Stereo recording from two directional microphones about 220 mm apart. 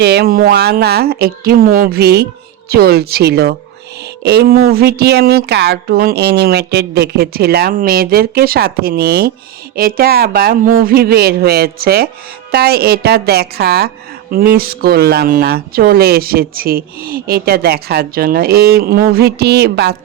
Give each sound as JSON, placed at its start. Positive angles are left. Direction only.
{"t": 0.0, "sound": "a woman's voice", "side_deg": -45}